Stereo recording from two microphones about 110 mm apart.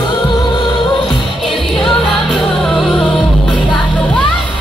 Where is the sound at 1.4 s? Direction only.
Centre (ahead or behind).